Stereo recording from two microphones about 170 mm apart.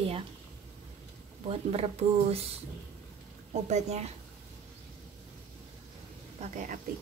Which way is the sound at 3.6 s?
40° right (ahead or behind).